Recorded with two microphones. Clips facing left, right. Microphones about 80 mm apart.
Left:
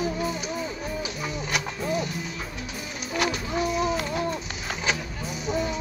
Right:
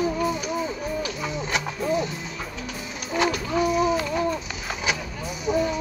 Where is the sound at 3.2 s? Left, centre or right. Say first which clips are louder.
Right 4 dB; centre.